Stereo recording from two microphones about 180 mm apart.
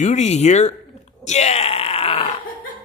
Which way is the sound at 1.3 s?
35° left (ahead or behind).